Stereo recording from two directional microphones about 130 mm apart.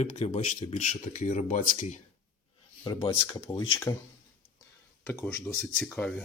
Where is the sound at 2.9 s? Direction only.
40° left (ahead or behind).